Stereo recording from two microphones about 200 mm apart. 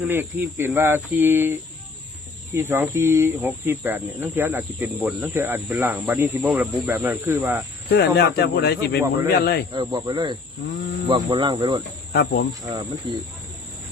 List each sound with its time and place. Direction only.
0.0 s speech: 10° right (ahead or behind)
7.9 s speech: 55° left (ahead or behind)
9.7 s speech: 20° right (ahead or behind)
12.1 s speech: 55° left (ahead or behind)
12.6 s speech: 20° right (ahead or behind)